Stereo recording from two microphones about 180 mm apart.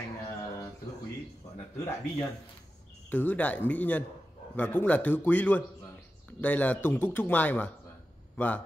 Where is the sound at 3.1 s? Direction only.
10° left (ahead or behind).